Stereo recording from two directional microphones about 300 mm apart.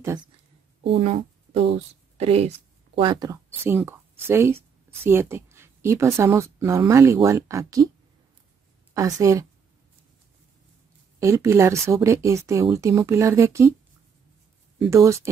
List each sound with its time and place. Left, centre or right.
0.8 s a woman's voice: centre
8.9 s a woman's voice: centre
11.1 s speech: centre
14.8 s speech: centre